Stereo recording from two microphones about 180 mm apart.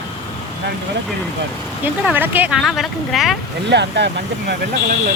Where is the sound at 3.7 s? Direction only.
70° right (ahead or behind).